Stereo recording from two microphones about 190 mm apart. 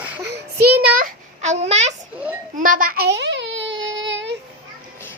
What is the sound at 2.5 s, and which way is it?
Child singing, 45° right (ahead or behind).